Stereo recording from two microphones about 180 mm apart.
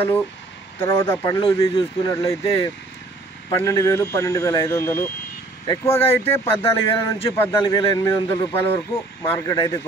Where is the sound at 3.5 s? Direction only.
15° left (ahead or behind).